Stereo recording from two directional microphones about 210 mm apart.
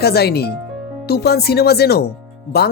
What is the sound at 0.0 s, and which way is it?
Speech, 50° left (ahead or behind).